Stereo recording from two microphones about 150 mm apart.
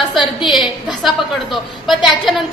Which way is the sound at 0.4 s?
Centre (ahead or behind).